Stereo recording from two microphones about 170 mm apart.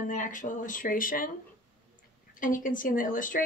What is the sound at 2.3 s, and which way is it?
Speech, 50° left (ahead or behind).